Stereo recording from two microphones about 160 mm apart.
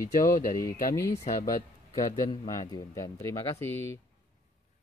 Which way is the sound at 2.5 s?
25° left (ahead or behind).